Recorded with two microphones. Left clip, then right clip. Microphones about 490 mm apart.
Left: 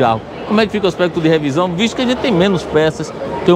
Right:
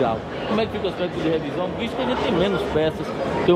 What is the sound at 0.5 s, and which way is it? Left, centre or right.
Speech, left.